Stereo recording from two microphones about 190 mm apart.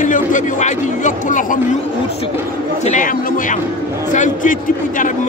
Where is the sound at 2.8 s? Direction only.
40° left (ahead or behind).